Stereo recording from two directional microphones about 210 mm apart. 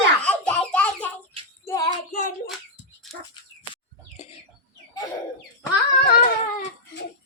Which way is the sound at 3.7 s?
30° left (ahead or behind).